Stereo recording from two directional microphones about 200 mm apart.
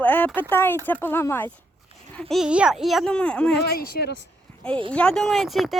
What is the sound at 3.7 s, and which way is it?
Speech, 50° left (ahead or behind).